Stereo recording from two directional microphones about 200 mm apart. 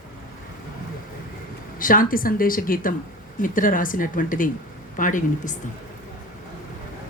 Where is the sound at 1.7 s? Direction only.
45° left (ahead or behind).